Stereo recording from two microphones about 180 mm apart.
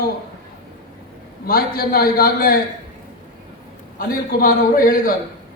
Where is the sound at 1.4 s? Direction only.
55° left (ahead or behind).